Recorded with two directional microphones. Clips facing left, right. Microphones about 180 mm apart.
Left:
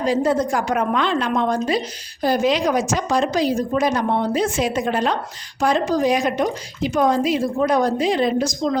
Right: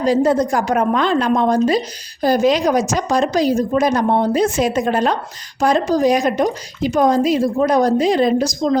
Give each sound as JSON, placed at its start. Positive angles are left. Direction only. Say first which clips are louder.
{"t": 0.0, "sound": "speech", "louder": "right 4 dB", "side_deg": -40}